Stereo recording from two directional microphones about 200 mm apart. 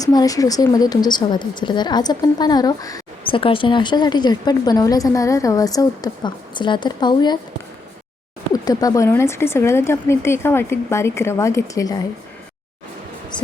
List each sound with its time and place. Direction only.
0.0 s a woman's voice: 20° left (ahead or behind)
8.5 s speech: 20° left (ahead or behind)